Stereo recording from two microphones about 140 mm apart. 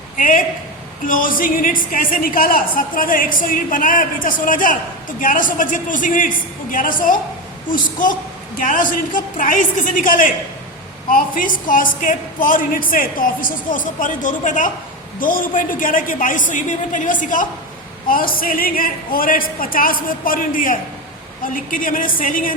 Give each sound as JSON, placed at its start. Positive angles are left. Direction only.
{"t": 0.2, "sound": "a sound", "side_deg": 65}
{"t": 1.0, "sound": "a woman's voice", "side_deg": 80}
{"t": 15.2, "sound": "a woman's voice", "side_deg": 80}
{"t": 18.1, "sound": "a woman's voice", "side_deg": 90}